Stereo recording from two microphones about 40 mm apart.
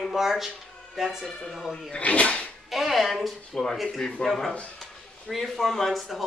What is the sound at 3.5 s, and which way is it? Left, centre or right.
Speech, left.